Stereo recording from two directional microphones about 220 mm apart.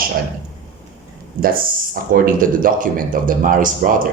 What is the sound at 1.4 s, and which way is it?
Speech, 40° right (ahead or behind).